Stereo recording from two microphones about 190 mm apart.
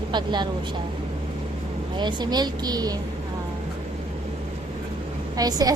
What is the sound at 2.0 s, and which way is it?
A woman's voice, 25° right (ahead or behind).